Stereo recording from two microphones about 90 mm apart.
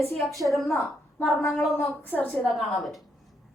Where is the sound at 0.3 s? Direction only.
40° right (ahead or behind).